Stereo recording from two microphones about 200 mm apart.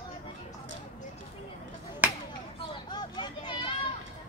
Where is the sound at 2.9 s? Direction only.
20° left (ahead or behind).